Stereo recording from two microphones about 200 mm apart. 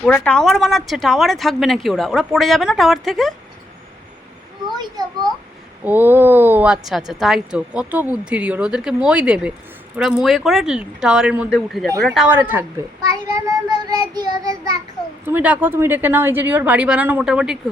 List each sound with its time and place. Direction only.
0.0 s speech: 5° left (ahead or behind)
5.0 s child singing: 20° right (ahead or behind)
5.8 s a woman's voice: 10° right (ahead or behind)
13.3 s child singing: 20° right (ahead or behind)
15.3 s a woman's voice: 10° right (ahead or behind)